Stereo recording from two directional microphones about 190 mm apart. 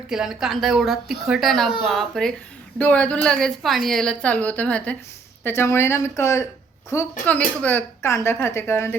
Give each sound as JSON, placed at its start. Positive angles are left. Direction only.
{"t": 0.1, "sound": "a woman's voice", "side_deg": -5}